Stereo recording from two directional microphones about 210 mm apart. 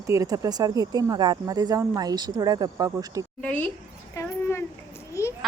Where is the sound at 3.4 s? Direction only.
5° left (ahead or behind).